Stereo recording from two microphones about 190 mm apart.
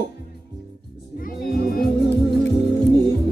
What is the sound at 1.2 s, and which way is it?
Music, 50° left (ahead or behind).